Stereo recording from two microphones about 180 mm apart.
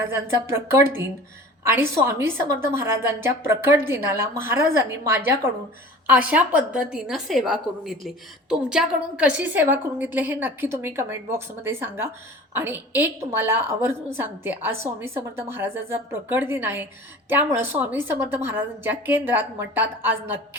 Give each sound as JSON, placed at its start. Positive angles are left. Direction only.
{"t": 0.0, "sound": "a woman's voice", "side_deg": -15}